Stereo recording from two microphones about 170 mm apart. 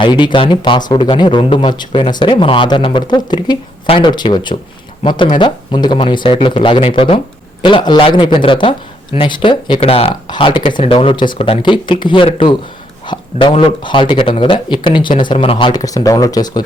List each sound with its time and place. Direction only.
0.0 s speech: 25° left (ahead or behind)